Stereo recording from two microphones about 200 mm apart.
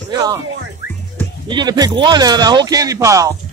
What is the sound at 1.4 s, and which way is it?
Speech, 20° right (ahead or behind).